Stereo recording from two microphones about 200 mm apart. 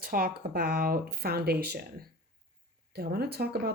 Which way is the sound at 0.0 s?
45° right (ahead or behind).